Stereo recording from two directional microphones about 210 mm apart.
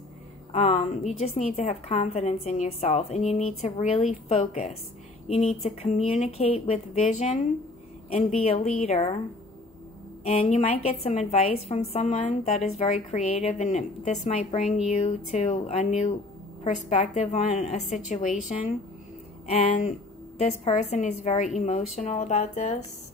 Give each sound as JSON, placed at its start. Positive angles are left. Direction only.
{"t": 0.5, "sound": "a woman's voice", "side_deg": 35}
{"t": 10.2, "sound": "a woman's voice", "side_deg": 35}
{"t": 19.5, "sound": "a woman's voice", "side_deg": 35}